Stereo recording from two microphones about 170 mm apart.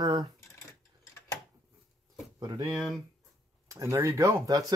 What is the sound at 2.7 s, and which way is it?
Speech, centre (ahead or behind).